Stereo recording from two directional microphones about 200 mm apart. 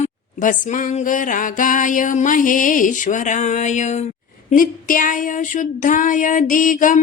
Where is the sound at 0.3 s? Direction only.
40° left (ahead or behind).